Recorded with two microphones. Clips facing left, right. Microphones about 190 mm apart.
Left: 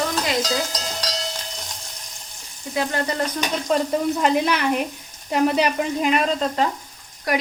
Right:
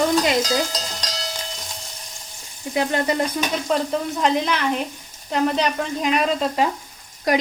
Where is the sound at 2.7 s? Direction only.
20° right (ahead or behind).